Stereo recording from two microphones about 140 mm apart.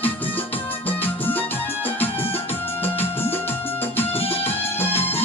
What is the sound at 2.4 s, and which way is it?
Music, 15° left (ahead or behind).